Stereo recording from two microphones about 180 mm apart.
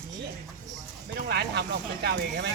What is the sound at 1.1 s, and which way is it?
Speech, 70° right (ahead or behind).